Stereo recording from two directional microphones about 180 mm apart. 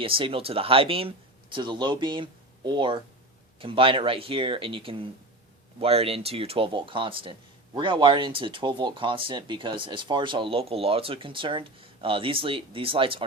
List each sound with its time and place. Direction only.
0.0 s speech: 30° right (ahead or behind)